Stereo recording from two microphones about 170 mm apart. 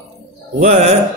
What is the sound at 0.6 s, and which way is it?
Speech, 40° right (ahead or behind).